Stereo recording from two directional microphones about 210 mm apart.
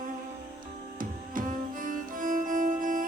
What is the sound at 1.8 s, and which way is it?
Music, 40° right (ahead or behind).